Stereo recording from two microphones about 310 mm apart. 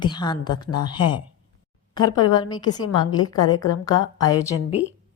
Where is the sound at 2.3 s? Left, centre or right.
Centre.